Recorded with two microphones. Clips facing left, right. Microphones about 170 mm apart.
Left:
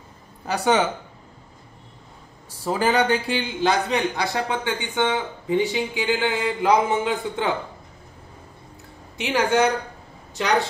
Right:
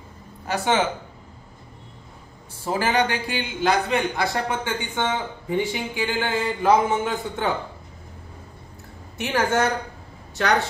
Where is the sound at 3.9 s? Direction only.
20° left (ahead or behind).